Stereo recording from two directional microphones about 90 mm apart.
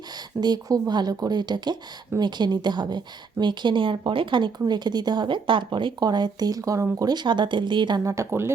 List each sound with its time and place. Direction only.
0.1 s speech: 50° right (ahead or behind)
8.0 s speech: 35° right (ahead or behind)